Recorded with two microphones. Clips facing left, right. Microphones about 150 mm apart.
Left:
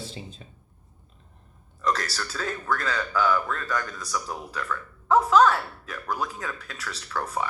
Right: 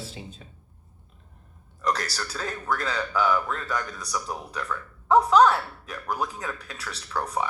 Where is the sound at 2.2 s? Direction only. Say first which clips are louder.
Left 1 dB; 10° right (ahead or behind).